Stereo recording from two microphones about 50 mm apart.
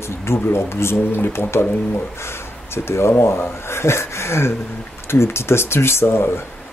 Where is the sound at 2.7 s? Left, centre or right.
Left.